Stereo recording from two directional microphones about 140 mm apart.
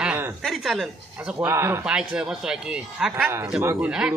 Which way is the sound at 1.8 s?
5° right (ahead or behind).